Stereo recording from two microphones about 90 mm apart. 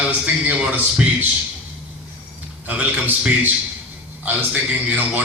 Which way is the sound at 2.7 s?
15° right (ahead or behind).